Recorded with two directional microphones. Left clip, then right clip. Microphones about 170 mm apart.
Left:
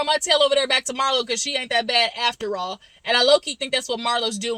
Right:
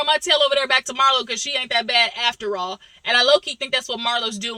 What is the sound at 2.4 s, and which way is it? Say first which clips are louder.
Speech: right 2 dB; 15° left (ahead or behind).